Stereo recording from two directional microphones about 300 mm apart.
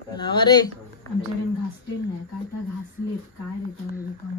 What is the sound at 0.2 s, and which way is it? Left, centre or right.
Speech, centre.